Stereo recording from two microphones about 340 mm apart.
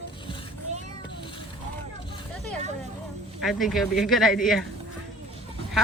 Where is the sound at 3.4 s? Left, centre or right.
Centre.